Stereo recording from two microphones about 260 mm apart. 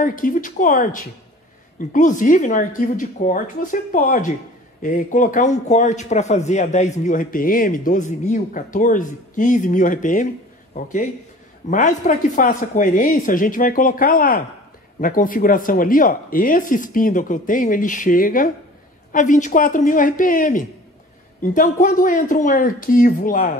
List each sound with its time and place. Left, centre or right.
0.0 s a man's voice: left